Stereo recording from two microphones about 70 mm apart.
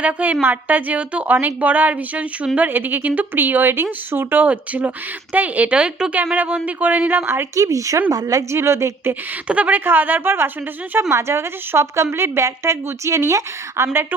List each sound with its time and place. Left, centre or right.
0.0 s a woman's voice: right
7.5 s a woman's voice: right
9.5 s a woman's voice: right